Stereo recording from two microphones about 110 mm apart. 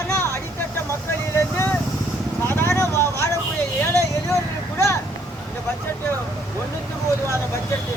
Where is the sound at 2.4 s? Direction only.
20° left (ahead or behind).